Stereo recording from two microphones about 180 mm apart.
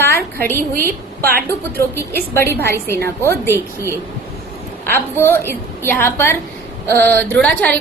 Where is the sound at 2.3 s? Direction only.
15° left (ahead or behind).